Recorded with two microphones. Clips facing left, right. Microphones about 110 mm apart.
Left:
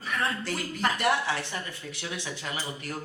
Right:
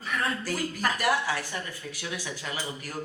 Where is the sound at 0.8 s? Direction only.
25° left (ahead or behind).